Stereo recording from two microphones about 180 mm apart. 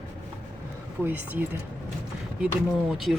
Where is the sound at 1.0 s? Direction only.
10° right (ahead or behind).